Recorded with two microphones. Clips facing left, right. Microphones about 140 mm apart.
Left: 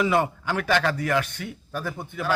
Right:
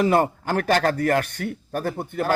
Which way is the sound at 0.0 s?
45° right (ahead or behind).